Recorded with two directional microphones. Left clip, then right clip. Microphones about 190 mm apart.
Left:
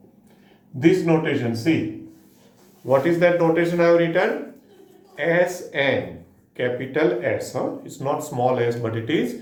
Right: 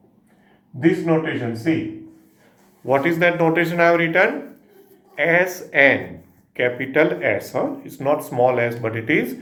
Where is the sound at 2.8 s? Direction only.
40° right (ahead or behind).